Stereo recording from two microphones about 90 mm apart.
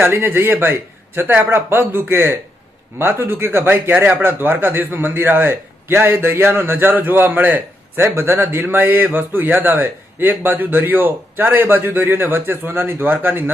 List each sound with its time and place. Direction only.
0.0 s a man's voice: 25° right (ahead or behind)